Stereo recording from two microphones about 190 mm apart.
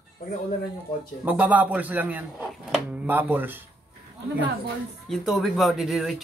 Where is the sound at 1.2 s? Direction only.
10° right (ahead or behind).